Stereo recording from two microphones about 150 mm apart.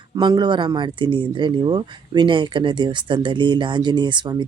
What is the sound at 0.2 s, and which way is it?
Speech, 30° right (ahead or behind).